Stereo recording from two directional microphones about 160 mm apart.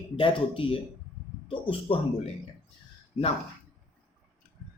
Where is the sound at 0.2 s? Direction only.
35° left (ahead or behind).